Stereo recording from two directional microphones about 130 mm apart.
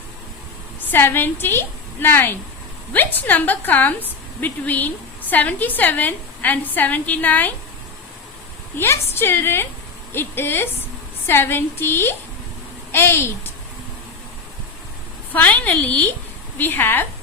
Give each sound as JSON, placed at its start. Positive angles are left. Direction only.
{"t": 0.9, "sound": "a woman's voice", "side_deg": 15}
{"t": 8.8, "sound": "a woman's voice", "side_deg": 20}
{"t": 15.3, "sound": "a woman's voice", "side_deg": 10}